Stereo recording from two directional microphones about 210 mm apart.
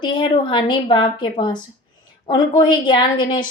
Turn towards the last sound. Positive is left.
turn(degrees=20)  # may be behind; listen again after turning